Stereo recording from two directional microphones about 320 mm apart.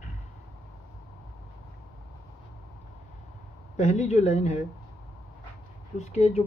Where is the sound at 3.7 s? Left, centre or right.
Centre.